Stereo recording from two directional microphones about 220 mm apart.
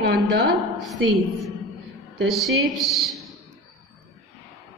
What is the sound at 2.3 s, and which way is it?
Speech, centre (ahead or behind).